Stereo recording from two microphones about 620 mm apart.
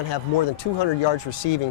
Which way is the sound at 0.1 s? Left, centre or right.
Left.